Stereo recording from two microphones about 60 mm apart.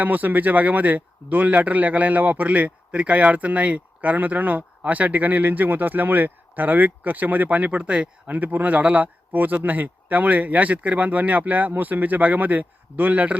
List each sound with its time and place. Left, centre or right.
0.0 s speech: right